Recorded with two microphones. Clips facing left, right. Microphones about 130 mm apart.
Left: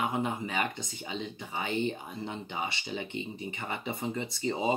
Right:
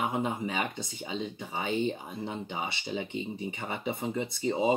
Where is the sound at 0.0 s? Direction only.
15° right (ahead or behind).